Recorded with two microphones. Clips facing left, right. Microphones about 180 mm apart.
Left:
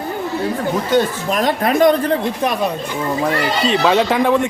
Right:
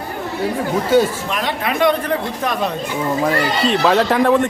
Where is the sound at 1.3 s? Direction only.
40° left (ahead or behind).